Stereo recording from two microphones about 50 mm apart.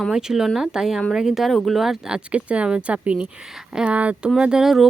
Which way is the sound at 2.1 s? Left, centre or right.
Right.